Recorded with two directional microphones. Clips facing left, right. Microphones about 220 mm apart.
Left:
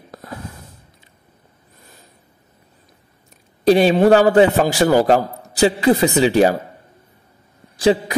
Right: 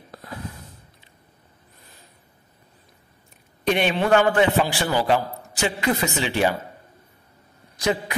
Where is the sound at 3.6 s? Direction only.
35° left (ahead or behind).